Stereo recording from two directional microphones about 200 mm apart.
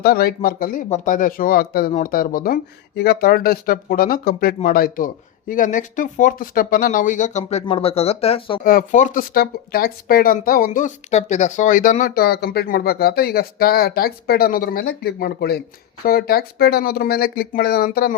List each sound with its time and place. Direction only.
0.0 s speech: 50° left (ahead or behind); by 8.6 s 25° left (ahead or behind)
8.6 s speech: 40° left (ahead or behind)